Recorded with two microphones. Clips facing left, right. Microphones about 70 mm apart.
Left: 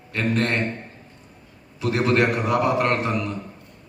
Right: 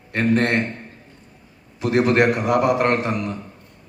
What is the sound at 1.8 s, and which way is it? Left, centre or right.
A man's voice, right.